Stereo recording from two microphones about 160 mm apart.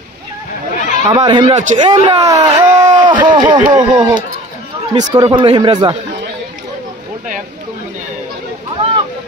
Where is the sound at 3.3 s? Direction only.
25° right (ahead or behind).